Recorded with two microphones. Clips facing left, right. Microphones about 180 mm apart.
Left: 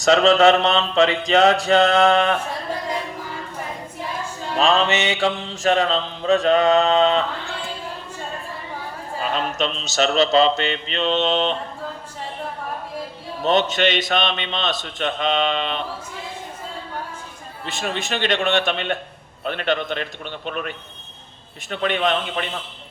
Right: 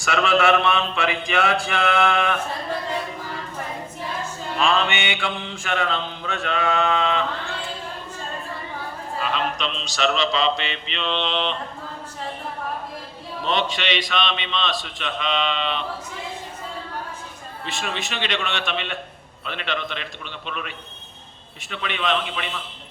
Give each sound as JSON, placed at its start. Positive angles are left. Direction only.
{"t": 0.1, "sound": "mantra", "side_deg": 40}
{"t": 4.6, "sound": "mantra", "side_deg": 40}
{"t": 9.2, "sound": "speech", "side_deg": 40}
{"t": 13.4, "sound": "speech", "side_deg": 45}
{"t": 17.8, "sound": "speech", "side_deg": 45}